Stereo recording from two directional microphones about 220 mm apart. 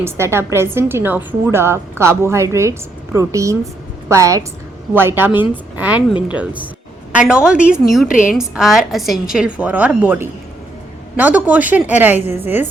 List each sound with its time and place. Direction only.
0.0 s a woman's voice: 10° right (ahead or behind)
8.0 s a woman's voice: 35° left (ahead or behind)
8.4 s a woman's voice: centre (ahead or behind)